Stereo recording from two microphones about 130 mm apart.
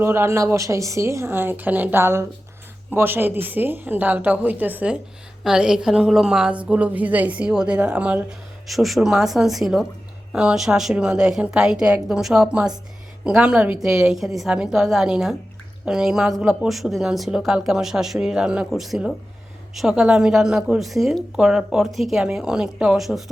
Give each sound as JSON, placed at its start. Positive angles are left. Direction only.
{"t": 0.0, "sound": "a woman's voice", "side_deg": -20}